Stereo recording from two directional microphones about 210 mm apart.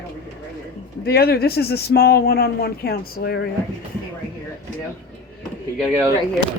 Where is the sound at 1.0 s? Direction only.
45° left (ahead or behind).